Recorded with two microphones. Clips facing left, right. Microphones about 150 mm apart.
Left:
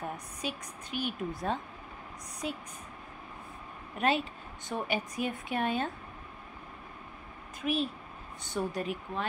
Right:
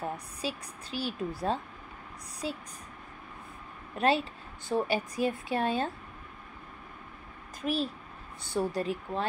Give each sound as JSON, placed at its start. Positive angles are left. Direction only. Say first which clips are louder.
{"t": 0.4, "sound": "speech", "louder": "right 2 dB", "side_deg": -35}
{"t": 4.0, "sound": "speech", "louder": "right 2 dB", "side_deg": -35}
{"t": 7.6, "sound": "speech", "louder": "even", "side_deg": -35}